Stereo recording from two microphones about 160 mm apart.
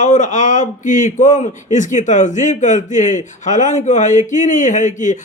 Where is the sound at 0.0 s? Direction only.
50° left (ahead or behind).